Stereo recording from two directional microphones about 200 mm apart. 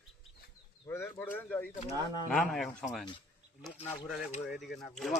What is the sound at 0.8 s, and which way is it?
A man's voice, 15° left (ahead or behind).